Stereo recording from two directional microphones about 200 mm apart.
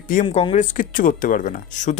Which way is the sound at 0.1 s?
40° left (ahead or behind).